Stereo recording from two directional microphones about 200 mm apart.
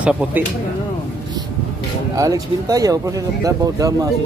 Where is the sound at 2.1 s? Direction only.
15° right (ahead or behind).